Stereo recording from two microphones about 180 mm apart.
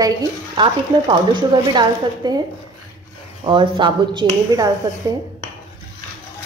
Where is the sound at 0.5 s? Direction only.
25° right (ahead or behind).